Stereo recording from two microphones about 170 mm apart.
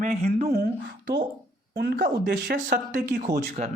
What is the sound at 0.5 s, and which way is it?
Speech, 75° right (ahead or behind).